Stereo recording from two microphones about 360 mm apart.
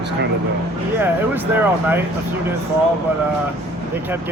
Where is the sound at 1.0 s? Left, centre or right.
Centre.